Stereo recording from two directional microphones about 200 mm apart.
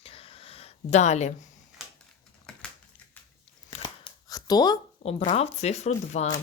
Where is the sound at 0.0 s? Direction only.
30° left (ahead or behind).